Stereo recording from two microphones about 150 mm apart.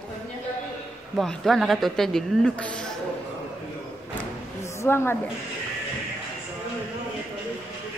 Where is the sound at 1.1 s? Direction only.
Centre (ahead or behind).